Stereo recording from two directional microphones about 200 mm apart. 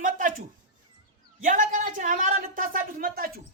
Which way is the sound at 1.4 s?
40° right (ahead or behind).